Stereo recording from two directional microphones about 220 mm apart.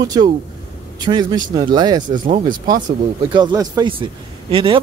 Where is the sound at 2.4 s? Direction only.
20° right (ahead or behind).